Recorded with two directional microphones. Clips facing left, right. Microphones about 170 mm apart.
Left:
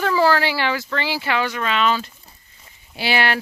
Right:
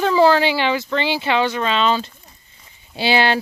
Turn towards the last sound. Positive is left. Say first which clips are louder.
# right 4 dB
turn(degrees=-25)  # may be behind; listen again after turning